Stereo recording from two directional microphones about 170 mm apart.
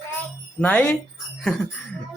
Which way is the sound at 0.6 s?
5° left (ahead or behind).